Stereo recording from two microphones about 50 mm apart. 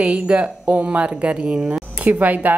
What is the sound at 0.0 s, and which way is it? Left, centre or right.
A woman's voice, right.